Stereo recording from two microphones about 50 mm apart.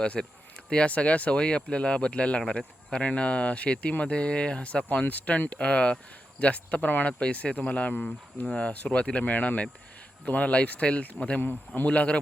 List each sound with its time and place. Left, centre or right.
0.0 s speech: centre
11.3 s speech: left
11.9 s speech: left